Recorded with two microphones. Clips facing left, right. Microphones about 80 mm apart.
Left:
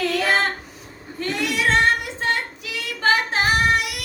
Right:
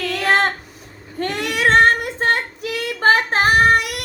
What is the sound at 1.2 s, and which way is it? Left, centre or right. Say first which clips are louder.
Child singing: right 3 dB; right.